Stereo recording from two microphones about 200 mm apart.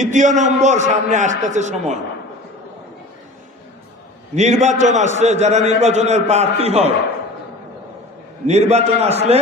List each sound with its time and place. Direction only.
0.0 s a man's voice: 40° right (ahead or behind)
4.4 s a man's voice: 35° right (ahead or behind)
8.4 s a man's voice: 35° right (ahead or behind)